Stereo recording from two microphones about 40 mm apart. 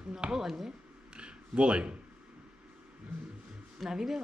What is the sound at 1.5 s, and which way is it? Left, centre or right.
Speech, right.